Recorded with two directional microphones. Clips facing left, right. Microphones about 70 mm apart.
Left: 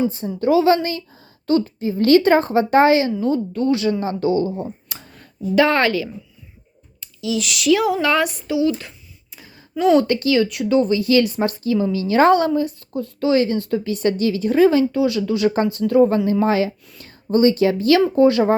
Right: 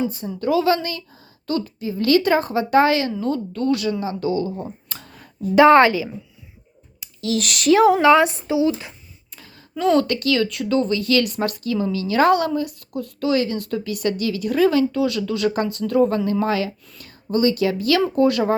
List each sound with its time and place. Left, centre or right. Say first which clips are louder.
0.1 s a woman's voice: left 4 dB; left
3.8 s a woman's voice: left 3 dB; left
4.5 s a sound: left 3 dB; centre
5.0 s a sound: right 1 dB; centre
5.5 s speech: right 5 dB; right
7.2 s speech: even; right
8.0 s speech: right 5 dB; right
9.6 s speech: left 3 dB; centre